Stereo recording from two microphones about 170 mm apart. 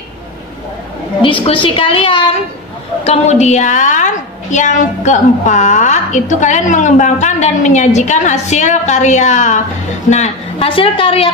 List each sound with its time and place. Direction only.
1.2 s a man's voice: 30° left (ahead or behind)